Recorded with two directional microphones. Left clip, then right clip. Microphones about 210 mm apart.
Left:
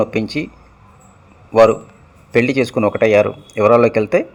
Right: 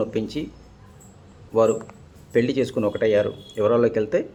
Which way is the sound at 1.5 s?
20° left (ahead or behind).